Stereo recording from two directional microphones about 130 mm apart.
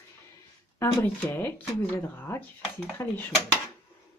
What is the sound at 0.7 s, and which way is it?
Speech, 15° left (ahead or behind).